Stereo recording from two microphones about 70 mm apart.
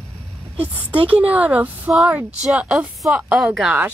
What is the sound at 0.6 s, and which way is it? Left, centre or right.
Speech, right.